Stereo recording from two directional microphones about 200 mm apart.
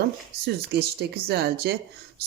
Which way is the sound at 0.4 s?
55° right (ahead or behind).